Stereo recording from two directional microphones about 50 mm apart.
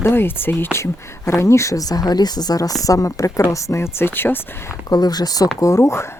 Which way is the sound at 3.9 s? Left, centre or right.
Left.